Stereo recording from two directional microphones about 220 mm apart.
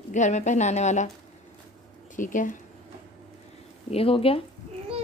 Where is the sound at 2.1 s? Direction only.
35° left (ahead or behind).